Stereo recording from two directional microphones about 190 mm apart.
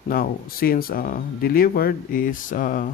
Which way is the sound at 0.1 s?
50° left (ahead or behind).